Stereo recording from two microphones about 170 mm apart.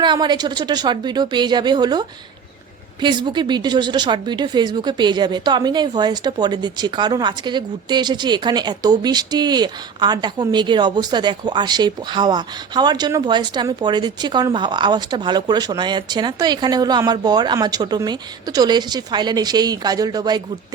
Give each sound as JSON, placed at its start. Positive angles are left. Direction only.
{"t": 0.0, "sound": "a woman's voice", "side_deg": -25}